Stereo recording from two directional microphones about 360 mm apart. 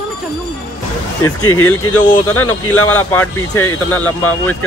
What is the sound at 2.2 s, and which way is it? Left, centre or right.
Speech, centre.